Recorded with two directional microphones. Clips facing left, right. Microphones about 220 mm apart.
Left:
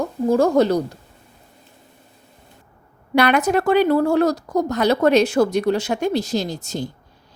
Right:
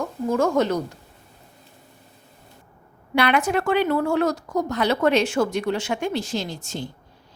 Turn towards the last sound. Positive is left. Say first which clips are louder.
# left 5 dB
turn(degrees=40)  # may be behind; listen again after turning